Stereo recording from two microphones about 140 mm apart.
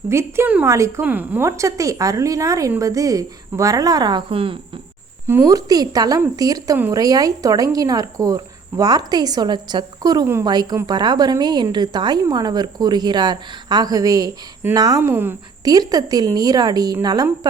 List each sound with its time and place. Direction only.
0.1 s a woman's voice: 20° right (ahead or behind); by 4.5 s 40° right (ahead or behind)
5.2 s a woman's voice: 15° right (ahead or behind)
15.6 s a woman's voice: 25° right (ahead or behind)